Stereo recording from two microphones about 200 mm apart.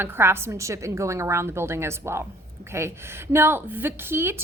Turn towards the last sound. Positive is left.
turn(degrees=-10)  # may be behind; listen again after turning